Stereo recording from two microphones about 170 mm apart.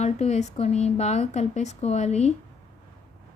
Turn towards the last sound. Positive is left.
turn(degrees=40)  # may be behind; listen again after turning